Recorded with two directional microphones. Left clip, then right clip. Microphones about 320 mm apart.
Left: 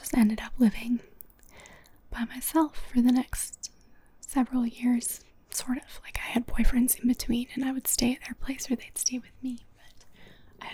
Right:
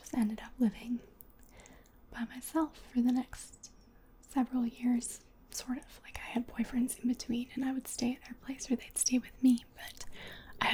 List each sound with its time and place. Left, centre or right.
0.0 s speech: left
9.0 s speech: centre
9.4 s speech: centre
9.7 s whispering: right